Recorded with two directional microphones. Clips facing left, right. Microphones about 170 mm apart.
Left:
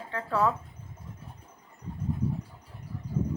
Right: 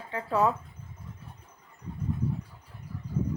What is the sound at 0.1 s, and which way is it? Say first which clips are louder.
Speech: right 1 dB; 15° right (ahead or behind).